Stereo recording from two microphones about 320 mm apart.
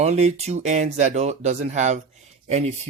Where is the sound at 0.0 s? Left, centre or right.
Centre.